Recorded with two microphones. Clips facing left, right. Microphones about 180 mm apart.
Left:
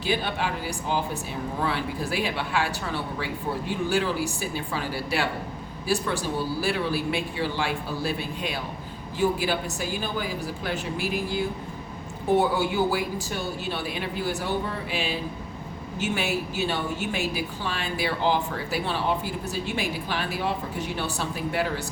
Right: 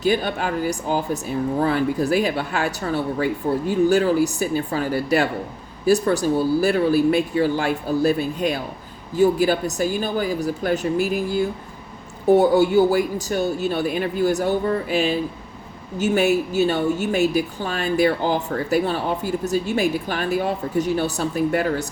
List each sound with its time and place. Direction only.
0.0 s a woman's voice: 45° right (ahead or behind)
12.4 s a woman's voice: 45° right (ahead or behind)